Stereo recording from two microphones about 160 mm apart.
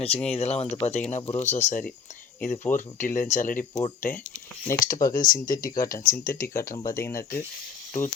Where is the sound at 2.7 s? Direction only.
50° left (ahead or behind).